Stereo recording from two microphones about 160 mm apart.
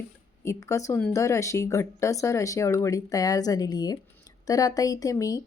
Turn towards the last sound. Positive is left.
turn(degrees=20)  # may be behind; listen again after turning